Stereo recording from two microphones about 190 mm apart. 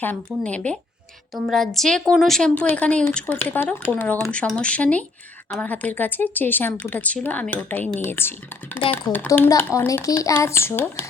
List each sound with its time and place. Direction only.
0.4 s a woman's voice: 5° left (ahead or behind)